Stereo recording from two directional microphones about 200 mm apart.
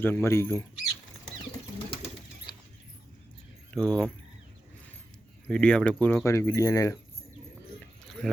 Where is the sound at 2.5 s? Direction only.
20° left (ahead or behind).